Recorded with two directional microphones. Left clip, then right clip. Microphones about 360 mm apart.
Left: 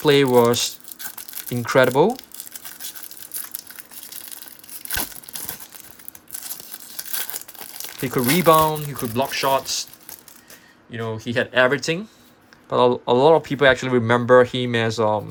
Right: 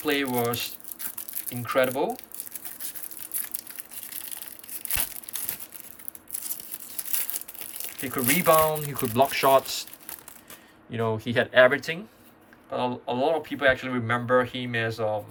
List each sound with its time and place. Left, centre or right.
0.0 s speech: centre
7.3 s speech: centre
10.9 s speech: centre